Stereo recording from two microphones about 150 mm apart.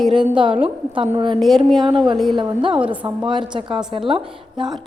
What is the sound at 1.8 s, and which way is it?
Speech, 30° right (ahead or behind).